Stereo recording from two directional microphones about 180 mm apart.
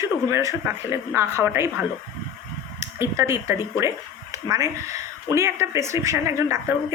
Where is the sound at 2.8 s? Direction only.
15° right (ahead or behind).